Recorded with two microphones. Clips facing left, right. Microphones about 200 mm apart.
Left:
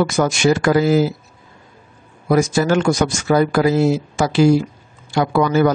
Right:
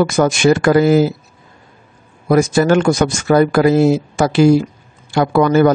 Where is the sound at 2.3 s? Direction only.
55° right (ahead or behind).